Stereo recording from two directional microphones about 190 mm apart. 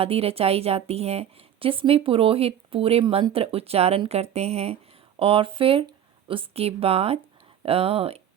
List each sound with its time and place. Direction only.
0.0 s a woman's voice: 30° right (ahead or behind)